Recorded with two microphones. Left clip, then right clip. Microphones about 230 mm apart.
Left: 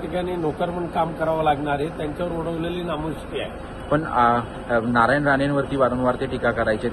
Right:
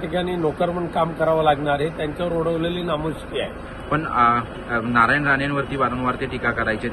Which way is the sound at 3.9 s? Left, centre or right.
Centre.